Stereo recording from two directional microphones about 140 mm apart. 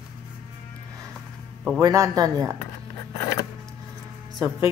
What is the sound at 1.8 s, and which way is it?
Speech, 25° right (ahead or behind).